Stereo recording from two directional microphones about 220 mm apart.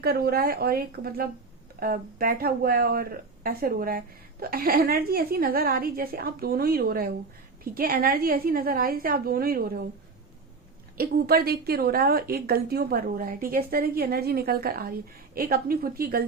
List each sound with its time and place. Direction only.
0.0 s a woman's voice: 45° right (ahead or behind)
10.9 s a woman's voice: 45° right (ahead or behind)